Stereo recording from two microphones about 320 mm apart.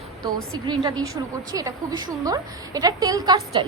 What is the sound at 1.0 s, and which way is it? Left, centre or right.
A woman's voice, centre.